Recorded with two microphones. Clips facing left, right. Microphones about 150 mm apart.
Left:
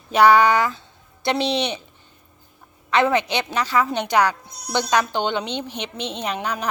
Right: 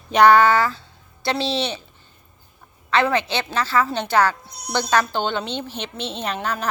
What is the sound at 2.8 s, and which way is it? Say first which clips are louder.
A woman's voice: left 1 dB; 20° left (ahead or behind).